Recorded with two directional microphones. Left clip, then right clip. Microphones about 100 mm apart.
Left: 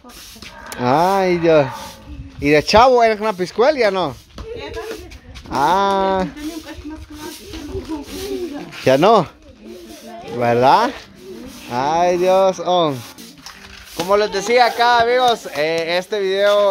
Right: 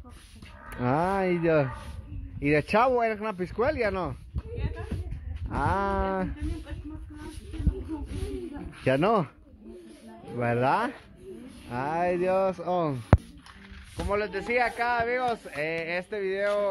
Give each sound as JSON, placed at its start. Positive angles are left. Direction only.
{"t": 0.7, "sound": "speech", "side_deg": 10}
{"t": 5.5, "sound": "speech", "side_deg": 20}
{"t": 8.8, "sound": "speech", "side_deg": 25}
{"t": 10.5, "sound": "speech", "side_deg": 25}
{"t": 11.7, "sound": "speech", "side_deg": 15}
{"t": 14.0, "sound": "speech", "side_deg": 20}